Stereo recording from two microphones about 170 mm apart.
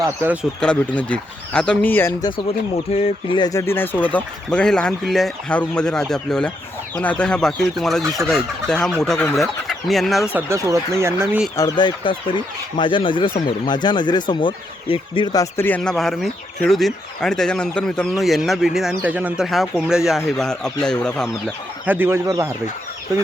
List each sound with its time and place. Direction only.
0.0 s speech: 15° right (ahead or behind)
0.6 s speech: 5° left (ahead or behind)
2.7 s speech: 35° left (ahead or behind); by 10.2 s centre (ahead or behind)
10.3 s speech: 15° right (ahead or behind)
11.5 s speech: 25° left (ahead or behind); by 21.5 s 5° left (ahead or behind)
21.8 s speech: 10° right (ahead or behind)